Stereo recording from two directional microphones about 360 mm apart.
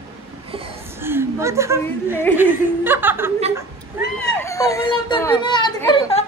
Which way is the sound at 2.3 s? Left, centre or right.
Centre.